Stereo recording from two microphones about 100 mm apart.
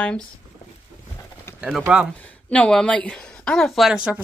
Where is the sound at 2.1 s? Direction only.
15° left (ahead or behind).